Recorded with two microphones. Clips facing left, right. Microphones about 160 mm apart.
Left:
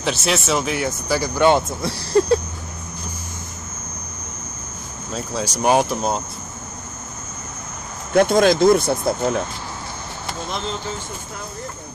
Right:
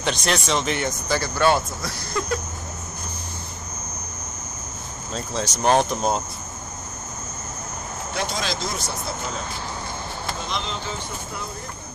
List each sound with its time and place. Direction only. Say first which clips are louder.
0.0 s speech: left 2 dB; 5° left (ahead or behind); by 2.4 s 30° left (ahead or behind)
5.1 s speech: left 2 dB; 10° left (ahead or behind)
8.1 s speech: left 14 dB; 55° left (ahead or behind)